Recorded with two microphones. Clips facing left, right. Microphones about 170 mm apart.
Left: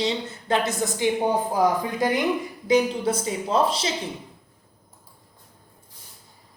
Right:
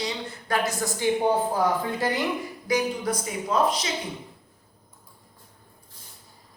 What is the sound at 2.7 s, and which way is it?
A woman's voice, 25° left (ahead or behind).